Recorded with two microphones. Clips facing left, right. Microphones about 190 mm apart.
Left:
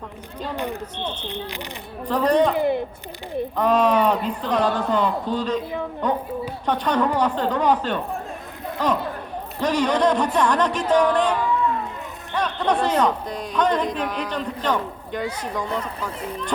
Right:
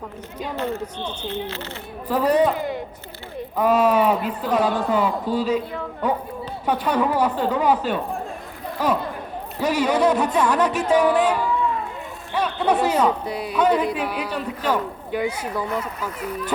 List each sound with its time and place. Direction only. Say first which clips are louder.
0.5 s speech: right 2 dB; 15° left (ahead or behind)
0.9 s speech: left 1 dB; 10° right (ahead or behind)
1.3 s speech: right 3 dB; 15° left (ahead or behind)
2.0 s speech: even; 5° right (ahead or behind)
3.6 s speech: right 1 dB; 10° right (ahead or behind)